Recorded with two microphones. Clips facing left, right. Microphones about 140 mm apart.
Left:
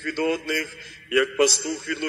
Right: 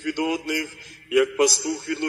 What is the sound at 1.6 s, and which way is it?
Speech, 40° right (ahead or behind).